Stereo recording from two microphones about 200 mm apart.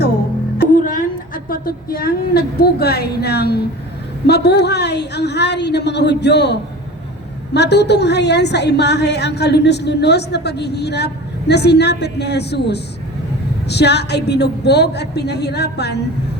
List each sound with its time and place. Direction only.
0.6 s a woman's voice: 40° left (ahead or behind)